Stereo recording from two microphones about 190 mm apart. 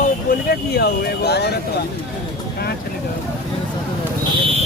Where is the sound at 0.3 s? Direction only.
45° left (ahead or behind).